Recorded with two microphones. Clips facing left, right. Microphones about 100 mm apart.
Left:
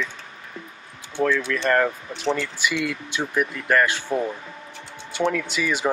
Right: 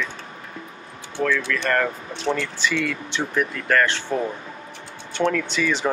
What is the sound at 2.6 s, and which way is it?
Speech, 10° left (ahead or behind).